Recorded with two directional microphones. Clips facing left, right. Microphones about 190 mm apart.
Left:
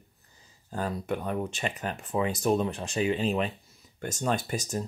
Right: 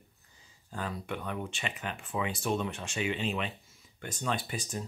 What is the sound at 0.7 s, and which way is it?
Speech, 40° left (ahead or behind).